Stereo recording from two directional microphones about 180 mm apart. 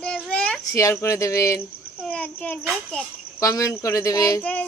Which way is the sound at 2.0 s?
5° left (ahead or behind).